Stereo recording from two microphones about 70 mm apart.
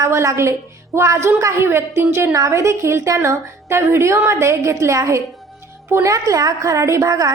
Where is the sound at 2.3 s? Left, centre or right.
Right.